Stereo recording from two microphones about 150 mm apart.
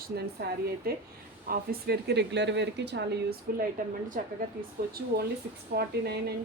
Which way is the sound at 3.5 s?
80° right.